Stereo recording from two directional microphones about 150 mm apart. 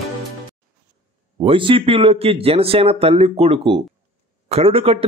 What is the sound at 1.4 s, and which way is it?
A man's voice, 35° right (ahead or behind).